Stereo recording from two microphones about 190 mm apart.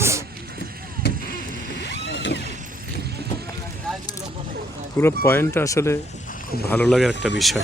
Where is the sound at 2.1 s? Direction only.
75° left (ahead or behind).